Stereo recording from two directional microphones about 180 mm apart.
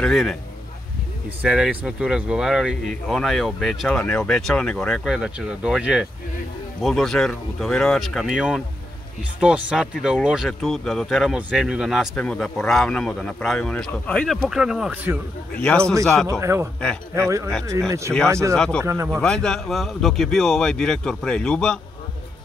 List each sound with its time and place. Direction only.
0.0 s speech: 5° left (ahead or behind)
1.4 s speech: 5° right (ahead or behind)
15.5 s speech: 5° left (ahead or behind)
16.3 s speech: 15° right (ahead or behind)
18.1 s speech: 5° right (ahead or behind)
18.5 s speech: 5° left (ahead or behind)
18.8 s speech: 15° right (ahead or behind)
19.2 s speech: 5° left (ahead or behind)